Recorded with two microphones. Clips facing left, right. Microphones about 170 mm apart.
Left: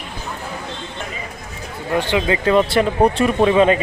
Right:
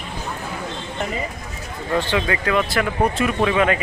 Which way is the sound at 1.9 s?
15° left (ahead or behind).